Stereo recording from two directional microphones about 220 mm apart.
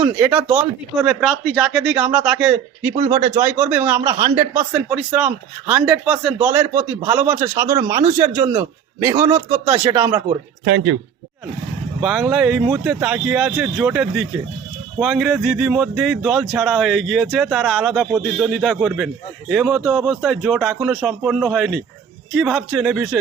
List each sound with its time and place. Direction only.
0.0 s speech: 10° right (ahead or behind)
0.9 s speech: centre (ahead or behind)
3.0 s speech: 25° right (ahead or behind)
3.4 s speech: 10° right (ahead or behind)
11.9 s speech: centre (ahead or behind)